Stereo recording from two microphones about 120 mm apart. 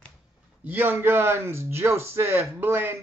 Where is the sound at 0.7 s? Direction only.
15° right (ahead or behind).